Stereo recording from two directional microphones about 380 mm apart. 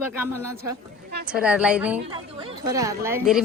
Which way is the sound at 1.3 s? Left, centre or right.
Centre.